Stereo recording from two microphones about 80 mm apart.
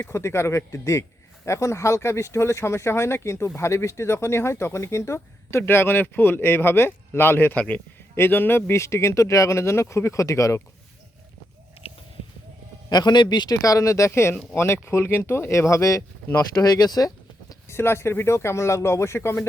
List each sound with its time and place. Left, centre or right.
0.0 s speech: left; by 7.8 s centre
8.1 s speech: left
12.9 s a man's voice: left
13.6 s speech: left
17.7 s speech: left